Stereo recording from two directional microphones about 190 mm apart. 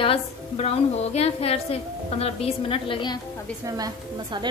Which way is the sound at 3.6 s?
20° right (ahead or behind).